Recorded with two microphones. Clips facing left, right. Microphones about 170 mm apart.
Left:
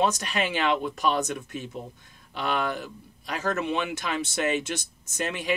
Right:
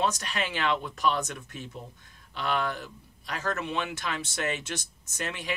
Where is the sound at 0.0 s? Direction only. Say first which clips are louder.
Left 4 dB; 15° left (ahead or behind).